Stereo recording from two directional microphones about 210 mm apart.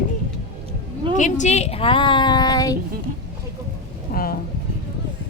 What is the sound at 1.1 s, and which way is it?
A woman's voice, 35° left (ahead or behind).